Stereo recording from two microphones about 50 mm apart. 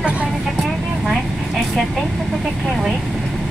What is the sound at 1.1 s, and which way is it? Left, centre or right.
Speech, centre.